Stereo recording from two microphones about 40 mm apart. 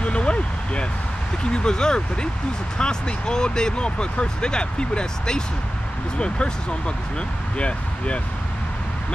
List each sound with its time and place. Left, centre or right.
0.0 s vehicle: left
1.4 s speech: left